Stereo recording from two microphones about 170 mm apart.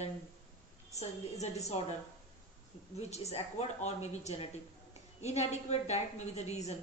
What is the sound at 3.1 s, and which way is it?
A woman's voice, 40° left (ahead or behind).